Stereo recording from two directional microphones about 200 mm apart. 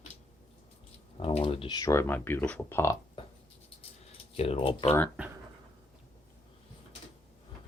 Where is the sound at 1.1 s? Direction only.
30° left (ahead or behind); by 2.9 s 10° left (ahead or behind).